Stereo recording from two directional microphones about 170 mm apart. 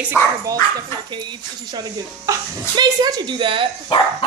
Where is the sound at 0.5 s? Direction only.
25° right (ahead or behind).